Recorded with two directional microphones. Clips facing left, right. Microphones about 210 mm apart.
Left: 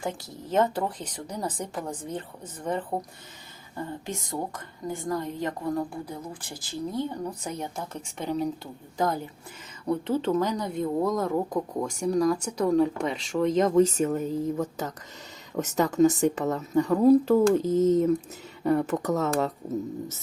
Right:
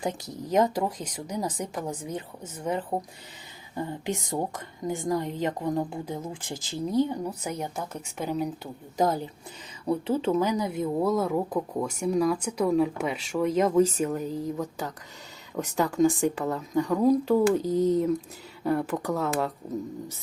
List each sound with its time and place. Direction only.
0.0 s a woman's voice: 20° right (ahead or behind)
9.0 s a woman's voice: 20° right (ahead or behind)
9.8 s speech: 10° right (ahead or behind)
11.3 s speech: 5° left (ahead or behind)
11.9 s speech: 5° right (ahead or behind)
16.0 s speech: centre (ahead or behind)